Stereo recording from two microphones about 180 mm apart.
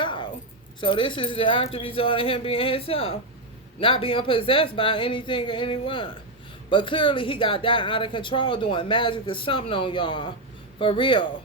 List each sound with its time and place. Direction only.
0.0 s keys jangling: 25° left (ahead or behind)
0.8 s speech: 25° left (ahead or behind)